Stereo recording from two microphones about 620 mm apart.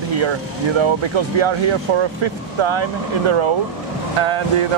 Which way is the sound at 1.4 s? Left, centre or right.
Right.